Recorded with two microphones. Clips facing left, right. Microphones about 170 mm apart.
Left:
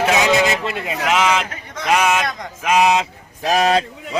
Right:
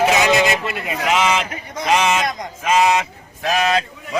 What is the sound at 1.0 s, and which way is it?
A man's voice, centre (ahead or behind).